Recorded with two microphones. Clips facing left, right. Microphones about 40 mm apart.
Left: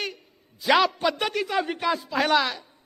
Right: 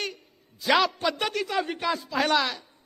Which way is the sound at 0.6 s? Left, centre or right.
Centre.